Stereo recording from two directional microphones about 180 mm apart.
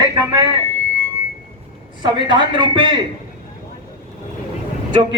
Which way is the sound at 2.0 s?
25° right (ahead or behind).